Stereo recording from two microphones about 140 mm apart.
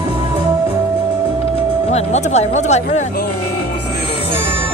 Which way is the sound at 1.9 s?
50° left (ahead or behind).